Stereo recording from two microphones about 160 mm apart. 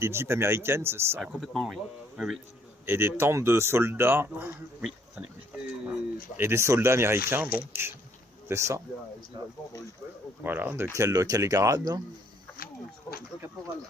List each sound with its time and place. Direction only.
0.0 s speech: 15° right (ahead or behind)
1.2 s speech: centre (ahead or behind)
2.8 s speech: 15° right (ahead or behind)
6.3 s speech: 15° right (ahead or behind)
10.4 s speech: 10° right (ahead or behind)